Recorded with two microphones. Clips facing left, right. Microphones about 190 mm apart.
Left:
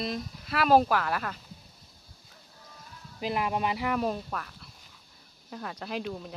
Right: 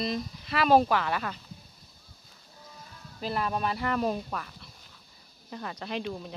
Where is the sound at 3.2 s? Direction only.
15° left (ahead or behind).